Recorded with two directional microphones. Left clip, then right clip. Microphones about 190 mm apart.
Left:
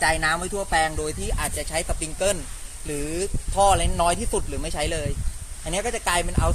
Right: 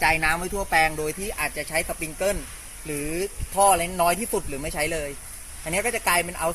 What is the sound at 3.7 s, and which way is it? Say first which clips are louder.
Speech: even; 20° left (ahead or behind).